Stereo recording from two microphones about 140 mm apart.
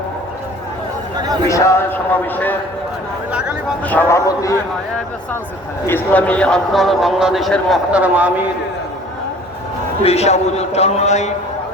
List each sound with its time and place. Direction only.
1.5 s a man's voice: 20° left (ahead or behind)
3.8 s a man's voice: 10° left (ahead or behind)
4.3 s a man's voice: 25° left (ahead or behind)
5.8 s speech: 15° left (ahead or behind)
8.0 s a man's voice: 10° right (ahead or behind)
10.0 s a man's voice: 50° left (ahead or behind)